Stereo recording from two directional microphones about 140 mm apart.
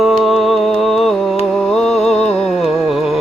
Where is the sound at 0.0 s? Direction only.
Centre (ahead or behind).